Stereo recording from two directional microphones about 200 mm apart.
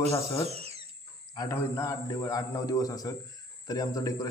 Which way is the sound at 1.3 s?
15° left (ahead or behind).